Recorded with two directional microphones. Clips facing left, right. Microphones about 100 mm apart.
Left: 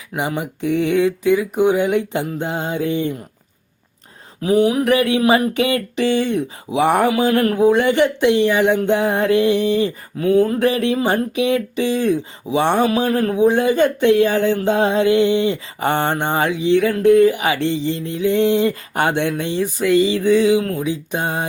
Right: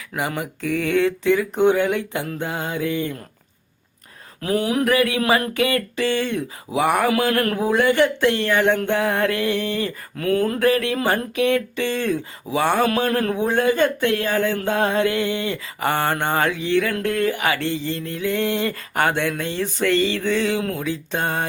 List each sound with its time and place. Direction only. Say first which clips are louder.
0.1 s music: left 3 dB; 20° left (ahead or behind)
4.4 s mantra: left 6 dB; 15° left (ahead or behind)
4.9 s speech: left 4 dB; 25° left (ahead or behind)
7.2 s music: left 5 dB; 20° left (ahead or behind)
10.6 s speech: left 2 dB; 20° left (ahead or behind)
11.3 s music: left 2 dB; 15° left (ahead or behind)
12.8 s a sound: left 3 dB; 10° left (ahead or behind)
13.3 s speech: left 5 dB; 15° left (ahead or behind)
16.9 s music: left 9 dB; 15° left (ahead or behind)